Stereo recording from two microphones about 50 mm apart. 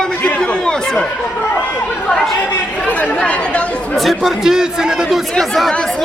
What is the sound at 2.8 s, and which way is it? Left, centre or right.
Speech, left.